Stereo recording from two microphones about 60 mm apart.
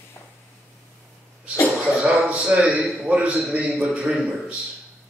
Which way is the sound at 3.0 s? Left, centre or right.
Centre.